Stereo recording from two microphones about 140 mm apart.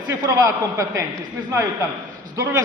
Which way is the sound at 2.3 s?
20° right (ahead or behind).